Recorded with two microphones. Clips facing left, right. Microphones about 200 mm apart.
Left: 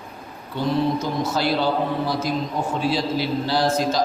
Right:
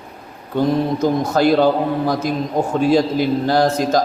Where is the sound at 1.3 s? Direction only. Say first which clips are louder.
Right 7 dB; 50° right (ahead or behind).